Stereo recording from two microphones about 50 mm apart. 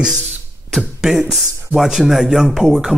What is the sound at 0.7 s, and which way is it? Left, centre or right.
Speech, centre.